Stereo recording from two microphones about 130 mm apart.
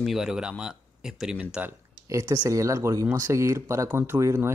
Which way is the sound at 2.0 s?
25° right (ahead or behind).